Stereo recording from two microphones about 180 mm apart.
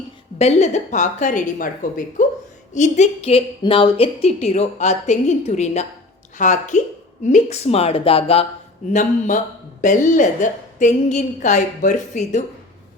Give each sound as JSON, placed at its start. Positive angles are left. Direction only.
{"t": 0.3, "sound": "a woman's voice", "side_deg": 35}
{"t": 8.9, "sound": "a woman's voice", "side_deg": 45}